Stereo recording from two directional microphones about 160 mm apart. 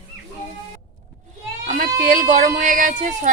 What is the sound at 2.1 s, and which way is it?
Speech, 55° right (ahead or behind).